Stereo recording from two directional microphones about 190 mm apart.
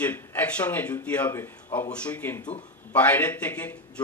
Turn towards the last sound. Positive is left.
turn(degrees=10)  # may be behind; listen again after turning